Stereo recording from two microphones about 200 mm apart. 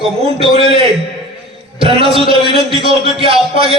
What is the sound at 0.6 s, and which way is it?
A man's voice, 30° right (ahead or behind).